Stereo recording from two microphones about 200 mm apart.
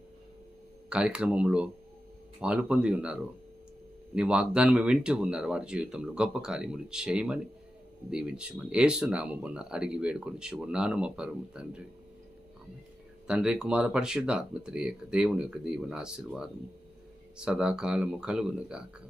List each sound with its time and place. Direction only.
0.9 s speech: 5° right (ahead or behind)
13.2 s speech: 5° right (ahead or behind)